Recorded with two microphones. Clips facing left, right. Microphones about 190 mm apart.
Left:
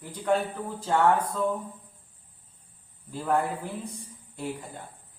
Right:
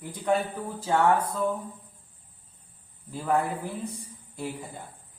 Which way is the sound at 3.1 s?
5° right (ahead or behind).